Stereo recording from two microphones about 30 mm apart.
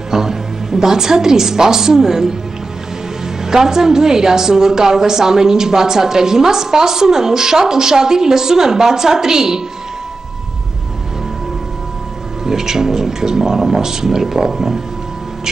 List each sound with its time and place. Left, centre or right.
0.1 s speech: centre
3.4 s a woman's voice: centre
12.4 s speech: centre